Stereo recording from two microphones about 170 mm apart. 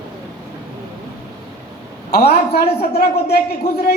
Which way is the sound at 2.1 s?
70° left (ahead or behind).